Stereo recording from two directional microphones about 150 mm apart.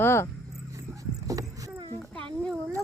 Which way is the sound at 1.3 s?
20° right (ahead or behind).